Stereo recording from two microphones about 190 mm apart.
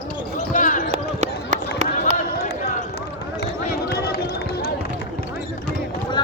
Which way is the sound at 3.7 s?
55° left (ahead or behind).